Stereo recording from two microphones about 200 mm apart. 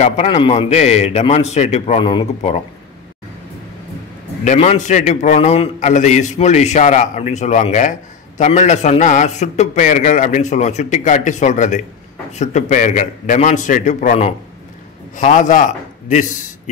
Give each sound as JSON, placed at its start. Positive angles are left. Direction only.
{"t": 0.0, "sound": "a man's voice", "side_deg": 30}
{"t": 4.5, "sound": "a man's voice", "side_deg": 35}